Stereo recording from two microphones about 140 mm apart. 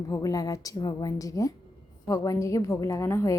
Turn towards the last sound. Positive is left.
turn(degrees=20)  # may be behind; listen again after turning